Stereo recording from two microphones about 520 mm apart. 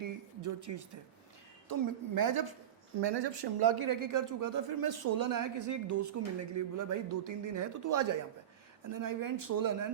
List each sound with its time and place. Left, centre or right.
0.0 s a woman's voice: right
3.0 s speech: right